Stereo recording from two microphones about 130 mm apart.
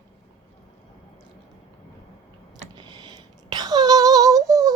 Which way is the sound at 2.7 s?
35° right (ahead or behind).